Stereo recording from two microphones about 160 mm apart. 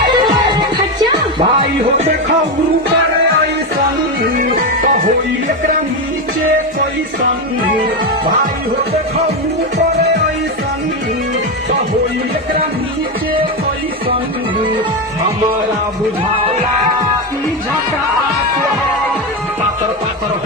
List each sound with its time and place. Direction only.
0.1 s music: 25° right (ahead or behind)
4.4 s music: 55° right (ahead or behind)